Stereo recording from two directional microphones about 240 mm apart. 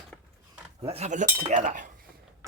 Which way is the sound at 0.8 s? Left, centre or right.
Right.